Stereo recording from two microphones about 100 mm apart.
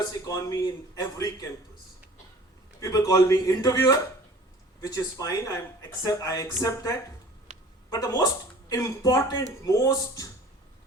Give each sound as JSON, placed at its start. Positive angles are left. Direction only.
{"t": 0.0, "sound": "speech", "side_deg": 35}
{"t": 2.8, "sound": "speech", "side_deg": 30}